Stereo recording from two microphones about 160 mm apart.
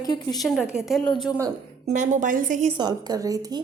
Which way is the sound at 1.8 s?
50° right (ahead or behind).